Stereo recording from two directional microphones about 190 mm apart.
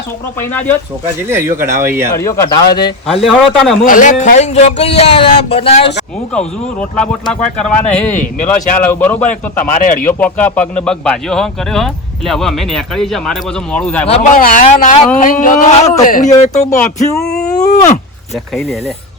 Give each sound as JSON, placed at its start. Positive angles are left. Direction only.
{"t": 0.3, "sound": "speech", "side_deg": 10}
{"t": 1.0, "sound": "speech", "side_deg": -15}
{"t": 2.1, "sound": "speech", "side_deg": 15}
{"t": 3.1, "sound": "speech", "side_deg": 0}
{"t": 3.8, "sound": "speech", "side_deg": 45}
{"t": 6.7, "sound": "speech", "side_deg": 5}
{"t": 8.1, "sound": "speech", "side_deg": 40}
{"t": 8.9, "sound": "speech", "side_deg": 10}
{"t": 9.2, "sound": "speech", "side_deg": 40}
{"t": 10.1, "sound": "speech", "side_deg": 10}
{"t": 14.1, "sound": "speech", "side_deg": 40}
{"t": 17.2, "sound": "a sound", "side_deg": 5}
{"t": 17.6, "sound": "speech", "side_deg": 40}